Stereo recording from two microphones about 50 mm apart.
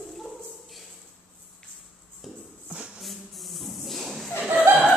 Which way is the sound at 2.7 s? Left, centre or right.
Right.